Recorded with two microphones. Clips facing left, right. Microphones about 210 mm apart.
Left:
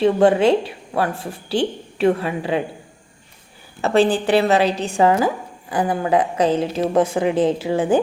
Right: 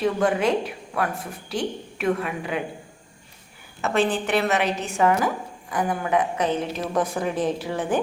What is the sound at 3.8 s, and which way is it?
A woman's voice, 35° left (ahead or behind).